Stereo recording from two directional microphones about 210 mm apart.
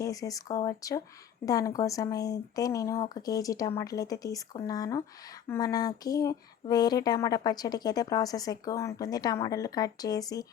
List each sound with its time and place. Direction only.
0.0 s speech: 15° left (ahead or behind)